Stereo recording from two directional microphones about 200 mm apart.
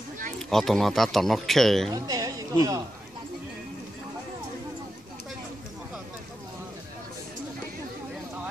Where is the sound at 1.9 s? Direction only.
20° right (ahead or behind).